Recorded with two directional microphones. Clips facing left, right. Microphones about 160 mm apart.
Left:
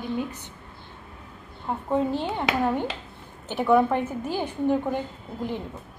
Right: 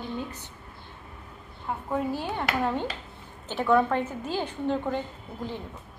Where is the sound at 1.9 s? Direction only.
20° left (ahead or behind).